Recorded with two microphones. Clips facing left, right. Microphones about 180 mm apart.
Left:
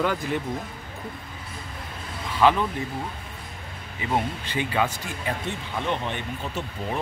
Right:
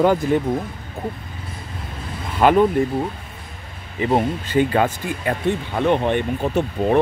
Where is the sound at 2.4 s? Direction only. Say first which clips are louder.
Right 6 dB; 50° right (ahead or behind).